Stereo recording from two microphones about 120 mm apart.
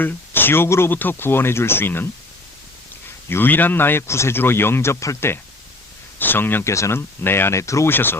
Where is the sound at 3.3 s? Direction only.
15° left (ahead or behind).